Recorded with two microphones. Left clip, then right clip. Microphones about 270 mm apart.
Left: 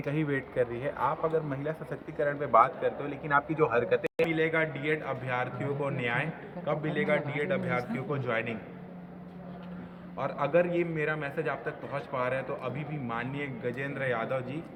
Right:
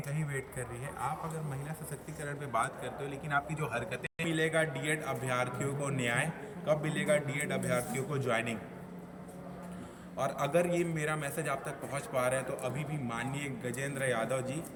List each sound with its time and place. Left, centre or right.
0.1 s speech: left
2.2 s a man's voice: centre
10.2 s a man's voice: centre